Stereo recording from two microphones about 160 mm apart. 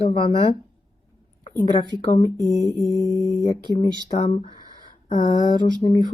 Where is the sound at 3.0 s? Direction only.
20° right (ahead or behind).